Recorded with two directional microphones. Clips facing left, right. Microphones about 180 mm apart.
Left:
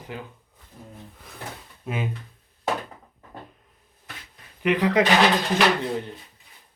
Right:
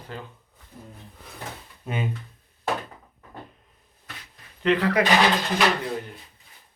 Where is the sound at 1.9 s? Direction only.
Centre (ahead or behind).